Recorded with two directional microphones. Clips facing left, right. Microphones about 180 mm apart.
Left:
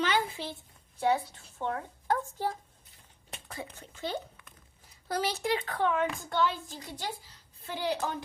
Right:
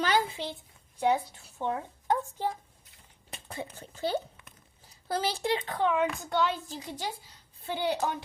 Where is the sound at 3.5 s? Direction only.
30° right (ahead or behind).